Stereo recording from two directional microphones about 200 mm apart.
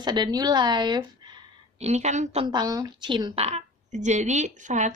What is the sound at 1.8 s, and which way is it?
Speech, 35° right (ahead or behind).